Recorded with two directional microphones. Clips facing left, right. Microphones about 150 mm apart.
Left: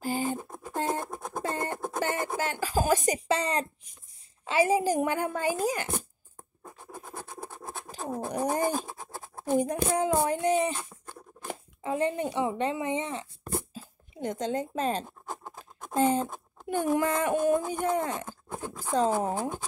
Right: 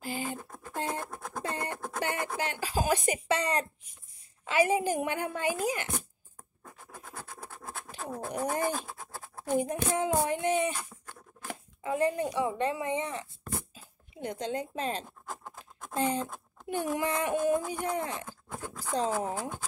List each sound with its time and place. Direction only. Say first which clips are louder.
0.0 s a sound: left 6 dB; 40° left (ahead or behind)
0.4 s a sound: left 4 dB; 20° left (ahead or behind)
1.4 s a sound: left 3 dB; 45° left (ahead or behind)
3.3 s a woman's voice: right 1 dB; 30° left (ahead or behind)
6.6 s scratch: left 4 dB; 20° left (ahead or behind)
8.0 s cat: left 3 dB; 20° left (ahead or behind)
8.8 s scratch: left 2 dB; 20° left (ahead or behind)
9.6 s a woman's voice: left 3 dB; 40° left (ahead or behind)
10.7 s a child's voice: left 2 dB; 25° left (ahead or behind)
14.1 s speech: left 3 dB; 45° left (ahead or behind)
15.4 s scratch: left 2 dB; 20° left (ahead or behind)
16.0 s speech: left 5 dB; 45° left (ahead or behind)